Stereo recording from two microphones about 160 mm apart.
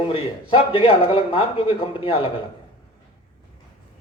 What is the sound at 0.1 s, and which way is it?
A man's voice, 35° left (ahead or behind).